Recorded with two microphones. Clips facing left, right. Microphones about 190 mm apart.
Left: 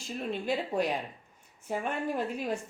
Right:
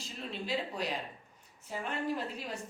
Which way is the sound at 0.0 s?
50° left (ahead or behind).